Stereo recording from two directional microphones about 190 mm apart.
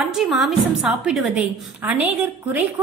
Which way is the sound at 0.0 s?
Centre (ahead or behind).